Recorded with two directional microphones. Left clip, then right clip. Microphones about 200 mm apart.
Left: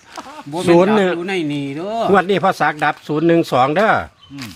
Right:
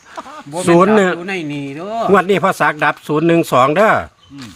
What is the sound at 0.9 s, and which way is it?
Speech, 30° right (ahead or behind).